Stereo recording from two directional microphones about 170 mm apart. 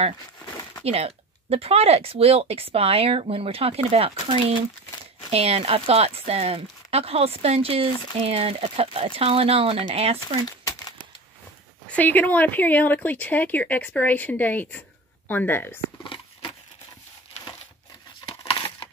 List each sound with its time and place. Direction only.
0.8 s speech: 35° right (ahead or behind)
11.9 s speech: 10° left (ahead or behind)
16.0 s a sound: 30° left (ahead or behind)
18.2 s crumpling: 25° left (ahead or behind)